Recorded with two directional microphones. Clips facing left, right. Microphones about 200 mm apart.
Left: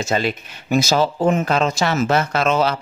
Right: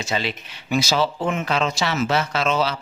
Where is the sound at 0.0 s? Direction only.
45° left (ahead or behind).